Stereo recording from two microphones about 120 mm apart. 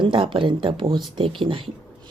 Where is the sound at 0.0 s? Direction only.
45° right (ahead or behind).